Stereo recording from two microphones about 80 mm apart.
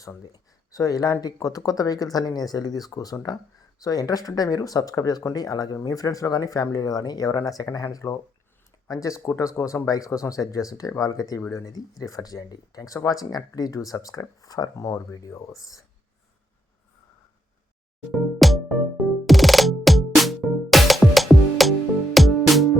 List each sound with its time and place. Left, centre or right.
0.3 s speech: left
18.3 s music: centre